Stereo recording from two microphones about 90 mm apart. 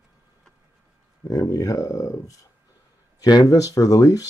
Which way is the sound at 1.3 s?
40° left (ahead or behind).